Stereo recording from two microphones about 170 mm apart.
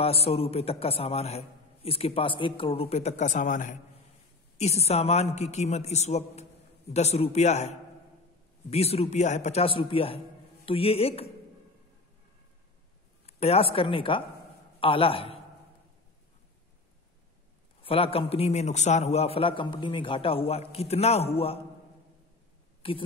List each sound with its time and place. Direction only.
0.0 s a man's voice: 35° left (ahead or behind)
4.6 s a man's voice: 40° left (ahead or behind)
13.3 s a man's voice: 35° left (ahead or behind)
17.8 s a man's voice: 35° left (ahead or behind)
22.8 s speech: 30° left (ahead or behind)